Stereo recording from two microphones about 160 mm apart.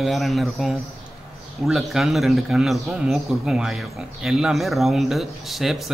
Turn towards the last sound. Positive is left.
turn(degrees=0)  # may be behind; listen again after turning